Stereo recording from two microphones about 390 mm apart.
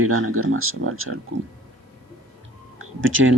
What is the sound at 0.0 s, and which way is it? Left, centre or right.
Speech, right.